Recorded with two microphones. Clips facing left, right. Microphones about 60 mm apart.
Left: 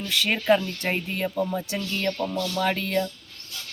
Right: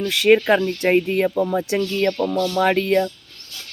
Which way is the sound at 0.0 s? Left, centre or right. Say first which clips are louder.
Right 11 dB; right.